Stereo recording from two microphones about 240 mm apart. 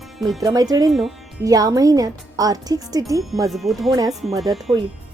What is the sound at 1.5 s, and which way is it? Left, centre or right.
Speech, centre.